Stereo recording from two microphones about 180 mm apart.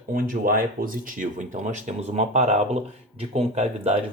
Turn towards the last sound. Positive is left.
turn(degrees=-40)  # may be behind; listen again after turning